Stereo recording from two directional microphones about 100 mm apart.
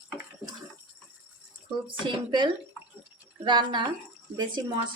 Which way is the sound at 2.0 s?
50° right (ahead or behind).